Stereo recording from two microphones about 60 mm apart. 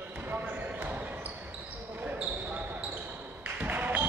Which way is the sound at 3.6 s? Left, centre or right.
Right.